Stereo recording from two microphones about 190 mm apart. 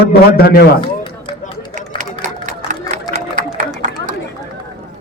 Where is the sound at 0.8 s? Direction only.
25° left (ahead or behind).